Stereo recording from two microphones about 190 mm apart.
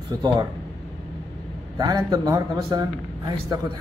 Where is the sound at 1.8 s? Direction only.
20° right (ahead or behind).